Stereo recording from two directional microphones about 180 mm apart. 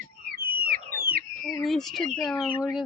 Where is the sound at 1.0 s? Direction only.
55° right (ahead or behind).